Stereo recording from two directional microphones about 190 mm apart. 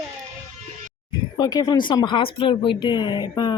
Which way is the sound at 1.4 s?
20° left (ahead or behind).